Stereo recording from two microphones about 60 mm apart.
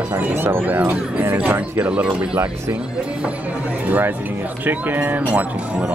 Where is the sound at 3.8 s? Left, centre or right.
Right.